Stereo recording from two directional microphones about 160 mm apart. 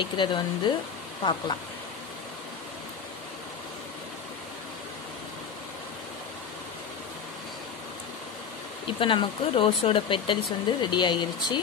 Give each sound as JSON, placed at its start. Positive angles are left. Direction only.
{"t": 0.0, "sound": "speech", "side_deg": 30}
{"t": 8.8, "sound": "speech", "side_deg": 30}